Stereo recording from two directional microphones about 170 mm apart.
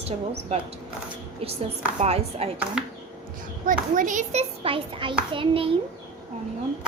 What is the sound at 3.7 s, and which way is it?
A child's voice, 50° right (ahead or behind).